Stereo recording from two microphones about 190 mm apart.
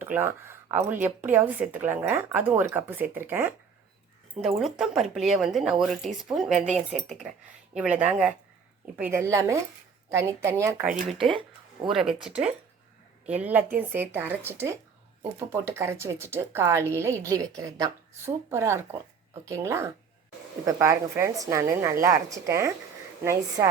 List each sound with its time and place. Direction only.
0.0 s speech: 10° right (ahead or behind)
6.6 s speech: 35° right (ahead or behind)
6.9 s speech: centre (ahead or behind)
11.2 s speech: 25° right (ahead or behind)
11.9 s speech: centre (ahead or behind)